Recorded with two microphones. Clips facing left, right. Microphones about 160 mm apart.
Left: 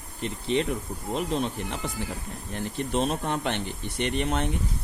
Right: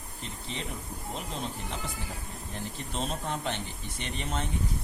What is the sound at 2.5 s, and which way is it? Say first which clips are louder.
Speech: left 10 dB; 65° left (ahead or behind).